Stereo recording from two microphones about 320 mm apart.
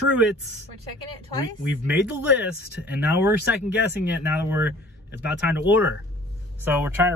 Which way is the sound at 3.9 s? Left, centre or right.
Centre.